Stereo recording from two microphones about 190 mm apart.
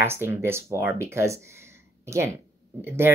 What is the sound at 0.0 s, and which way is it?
Speech, 10° right (ahead or behind).